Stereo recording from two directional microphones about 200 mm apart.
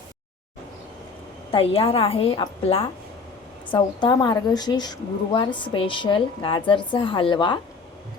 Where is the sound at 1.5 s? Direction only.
30° left (ahead or behind).